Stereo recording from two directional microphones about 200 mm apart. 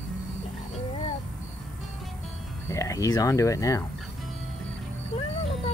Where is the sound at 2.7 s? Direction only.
15° left (ahead or behind).